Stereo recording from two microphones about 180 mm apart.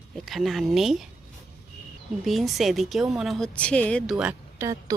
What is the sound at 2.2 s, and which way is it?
A woman's voice, centre (ahead or behind).